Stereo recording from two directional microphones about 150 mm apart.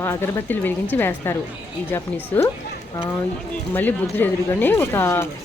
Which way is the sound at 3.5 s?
10° left (ahead or behind).